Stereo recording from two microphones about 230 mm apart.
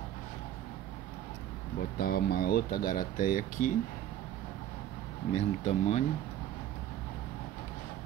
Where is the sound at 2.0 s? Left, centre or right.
Left.